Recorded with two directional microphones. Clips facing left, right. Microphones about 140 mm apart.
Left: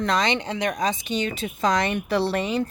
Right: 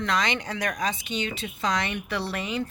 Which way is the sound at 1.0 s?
40° left (ahead or behind).